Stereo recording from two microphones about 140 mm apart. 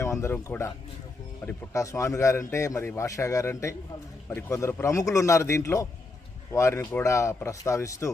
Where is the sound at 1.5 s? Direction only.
20° left (ahead or behind).